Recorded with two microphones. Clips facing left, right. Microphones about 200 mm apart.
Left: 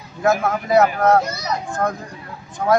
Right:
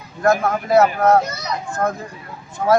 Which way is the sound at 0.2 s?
Centre (ahead or behind).